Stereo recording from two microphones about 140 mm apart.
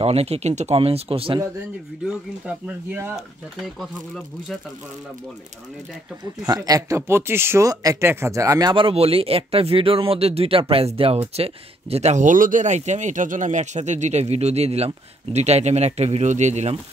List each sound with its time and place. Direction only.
0.0 s speech: 45° right (ahead or behind)
2.0 s speech: 10° right (ahead or behind)
3.6 s speech: centre (ahead or behind)
6.4 s speech: 25° right (ahead or behind); by 16.7 s 55° right (ahead or behind)